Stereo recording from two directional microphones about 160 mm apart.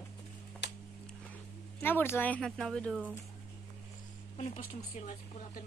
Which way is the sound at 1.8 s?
10° left (ahead or behind).